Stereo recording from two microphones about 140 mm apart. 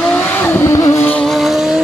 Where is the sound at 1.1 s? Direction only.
Centre (ahead or behind).